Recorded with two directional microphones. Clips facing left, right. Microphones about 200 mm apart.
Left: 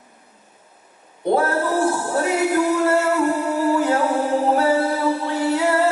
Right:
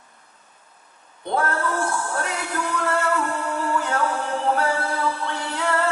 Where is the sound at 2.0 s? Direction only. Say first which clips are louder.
Left 5 dB; 25° left (ahead or behind).